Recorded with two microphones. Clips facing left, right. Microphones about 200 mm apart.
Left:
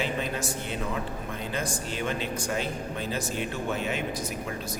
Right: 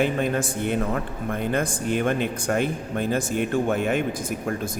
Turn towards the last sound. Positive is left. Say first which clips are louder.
# right 6 dB
turn(degrees=-50)  # may be behind; listen again after turning